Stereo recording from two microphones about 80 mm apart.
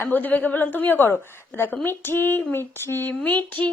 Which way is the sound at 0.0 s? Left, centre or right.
Left.